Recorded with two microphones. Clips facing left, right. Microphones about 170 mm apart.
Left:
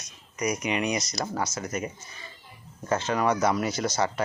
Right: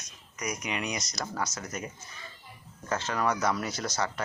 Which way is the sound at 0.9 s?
5° left (ahead or behind).